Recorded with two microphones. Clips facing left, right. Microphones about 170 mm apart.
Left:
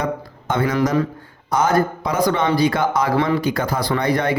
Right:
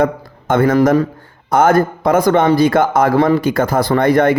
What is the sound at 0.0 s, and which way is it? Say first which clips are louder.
A man's voice: right 8 dB; 50° right (ahead or behind).